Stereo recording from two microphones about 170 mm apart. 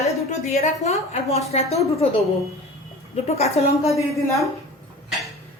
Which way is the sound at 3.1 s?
40° left (ahead or behind).